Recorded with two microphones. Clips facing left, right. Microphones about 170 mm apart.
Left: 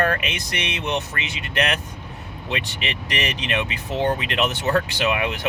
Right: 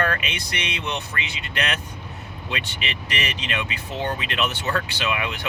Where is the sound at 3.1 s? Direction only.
40° left (ahead or behind).